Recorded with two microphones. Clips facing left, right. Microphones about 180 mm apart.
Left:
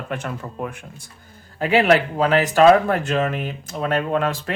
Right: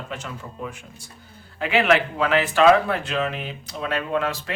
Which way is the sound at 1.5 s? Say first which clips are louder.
Left 3 dB; 40° left (ahead or behind).